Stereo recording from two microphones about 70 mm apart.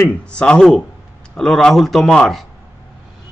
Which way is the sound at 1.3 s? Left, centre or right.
Centre.